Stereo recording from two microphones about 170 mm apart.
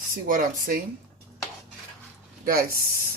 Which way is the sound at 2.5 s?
60° right (ahead or behind).